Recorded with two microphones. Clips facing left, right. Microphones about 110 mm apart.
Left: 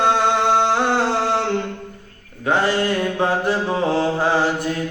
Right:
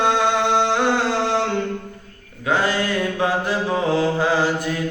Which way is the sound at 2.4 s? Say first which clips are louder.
Left 2 dB; 30° left (ahead or behind).